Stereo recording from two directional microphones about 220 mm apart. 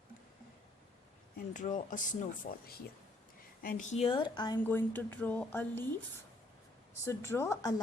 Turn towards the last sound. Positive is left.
turn(degrees=15)  # may be behind; listen again after turning